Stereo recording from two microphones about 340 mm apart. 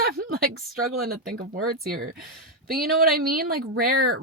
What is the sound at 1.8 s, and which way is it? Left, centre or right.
Speech, right.